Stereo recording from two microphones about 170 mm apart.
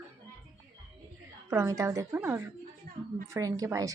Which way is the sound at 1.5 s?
15° right (ahead or behind).